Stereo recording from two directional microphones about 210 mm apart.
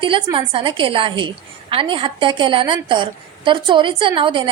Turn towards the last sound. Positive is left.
turn(degrees=-25)  # may be behind; listen again after turning